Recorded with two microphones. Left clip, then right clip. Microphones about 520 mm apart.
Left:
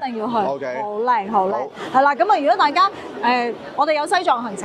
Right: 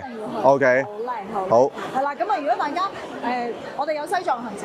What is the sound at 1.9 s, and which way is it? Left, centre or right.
A woman's voice, left.